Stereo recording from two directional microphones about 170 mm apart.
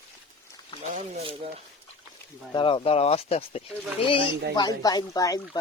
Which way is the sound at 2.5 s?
30° left (ahead or behind).